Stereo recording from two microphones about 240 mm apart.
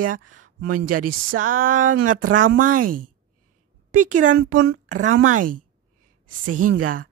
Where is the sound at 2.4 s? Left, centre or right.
Right.